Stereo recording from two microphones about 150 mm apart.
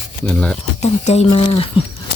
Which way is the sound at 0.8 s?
50° left (ahead or behind).